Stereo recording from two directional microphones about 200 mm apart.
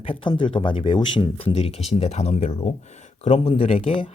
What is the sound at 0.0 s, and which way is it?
Speech, 25° left (ahead or behind).